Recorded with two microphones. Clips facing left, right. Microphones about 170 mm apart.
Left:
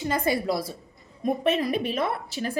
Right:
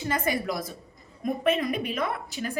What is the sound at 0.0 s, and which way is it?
A woman's voice, 30° left (ahead or behind).